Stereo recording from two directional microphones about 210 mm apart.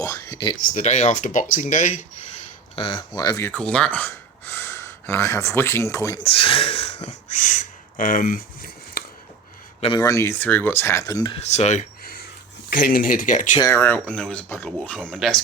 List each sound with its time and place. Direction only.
0.0 s a sound: 15° left (ahead or behind)
0.7 s speech: 35° left (ahead or behind)
2.7 s speech: 25° left (ahead or behind)
6.2 s speech: 25° left (ahead or behind); by 9.0 s 40° left (ahead or behind)
9.8 s speech: 20° left (ahead or behind); by 13.6 s 35° left (ahead or behind)
13.6 s speech: 10° left (ahead or behind)